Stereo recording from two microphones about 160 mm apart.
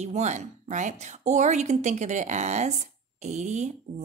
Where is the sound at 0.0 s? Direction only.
45° right (ahead or behind).